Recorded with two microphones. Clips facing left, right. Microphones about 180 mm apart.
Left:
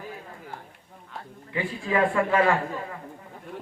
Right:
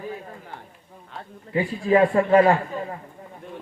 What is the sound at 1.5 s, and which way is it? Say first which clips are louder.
A man's voice: right 7 dB; 40° right (ahead or behind).